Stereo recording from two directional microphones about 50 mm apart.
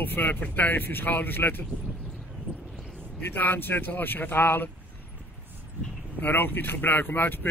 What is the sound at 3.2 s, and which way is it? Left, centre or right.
Speech, left.